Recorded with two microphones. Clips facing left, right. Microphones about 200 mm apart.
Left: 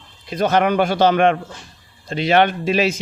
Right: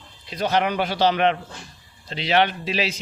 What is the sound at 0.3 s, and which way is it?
Speech, 50° left (ahead or behind).